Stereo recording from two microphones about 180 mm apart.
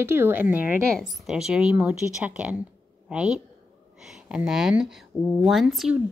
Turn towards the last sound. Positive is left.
turn(degrees=0)  # may be behind; listen again after turning